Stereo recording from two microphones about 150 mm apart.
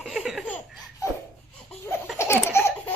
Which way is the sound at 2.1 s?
15° left (ahead or behind).